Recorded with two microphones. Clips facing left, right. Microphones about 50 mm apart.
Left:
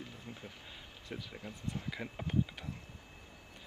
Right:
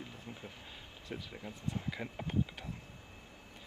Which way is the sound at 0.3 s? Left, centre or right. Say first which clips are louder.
Right 1 dB; right.